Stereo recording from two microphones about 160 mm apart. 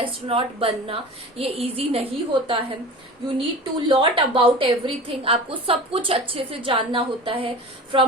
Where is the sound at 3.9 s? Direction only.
35° right (ahead or behind).